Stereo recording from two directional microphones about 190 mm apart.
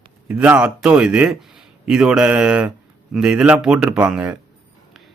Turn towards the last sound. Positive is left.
turn(degrees=-5)  # may be behind; listen again after turning